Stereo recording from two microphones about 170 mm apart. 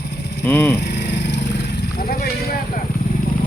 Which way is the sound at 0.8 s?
80° left.